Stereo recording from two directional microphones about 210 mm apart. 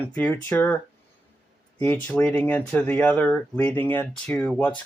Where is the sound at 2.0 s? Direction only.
5° left (ahead or behind).